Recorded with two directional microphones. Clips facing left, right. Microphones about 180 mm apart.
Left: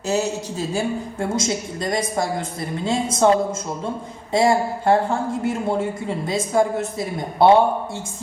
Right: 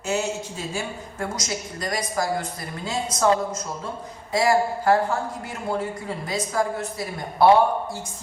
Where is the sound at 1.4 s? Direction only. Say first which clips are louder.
Left 6 dB; 25° left (ahead or behind).